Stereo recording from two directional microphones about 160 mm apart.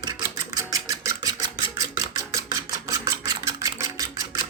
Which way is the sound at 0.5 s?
20° right (ahead or behind).